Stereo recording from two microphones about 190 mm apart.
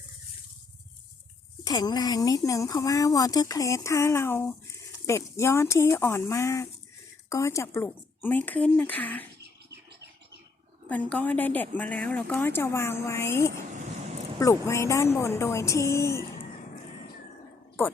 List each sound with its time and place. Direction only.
1.6 s a woman's voice: 20° left (ahead or behind)
10.8 s a woman's voice: 10° left (ahead or behind)
13.7 s vehicle: 35° right (ahead or behind)
14.3 s a woman's voice: 15° left (ahead or behind)